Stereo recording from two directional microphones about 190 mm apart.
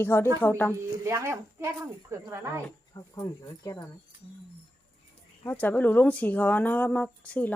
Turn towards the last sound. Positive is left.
turn(degrees=10)  # may be behind; listen again after turning